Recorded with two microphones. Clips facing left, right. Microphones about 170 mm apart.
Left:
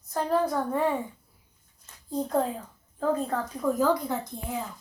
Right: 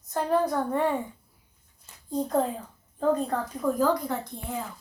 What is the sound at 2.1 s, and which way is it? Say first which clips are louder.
A woman's voice: right 1 dB; centre (ahead or behind).